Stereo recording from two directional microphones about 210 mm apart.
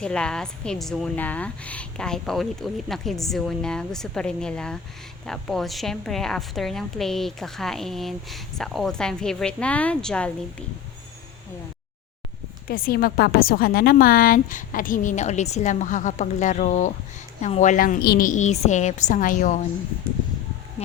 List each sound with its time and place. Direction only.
0.0 s a woman's voice: 5° left (ahead or behind)
12.6 s a woman's voice: 45° left (ahead or behind)
20.8 s speech: 30° left (ahead or behind)